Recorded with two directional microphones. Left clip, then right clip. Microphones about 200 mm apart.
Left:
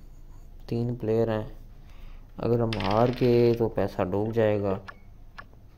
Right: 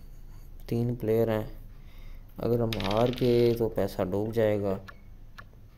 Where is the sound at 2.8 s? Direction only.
15° left (ahead or behind).